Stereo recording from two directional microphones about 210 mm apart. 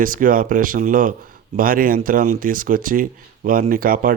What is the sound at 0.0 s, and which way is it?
Speech, 40° right (ahead or behind).